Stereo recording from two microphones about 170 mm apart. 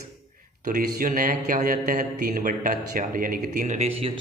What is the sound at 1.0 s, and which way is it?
Speech, 55° right (ahead or behind).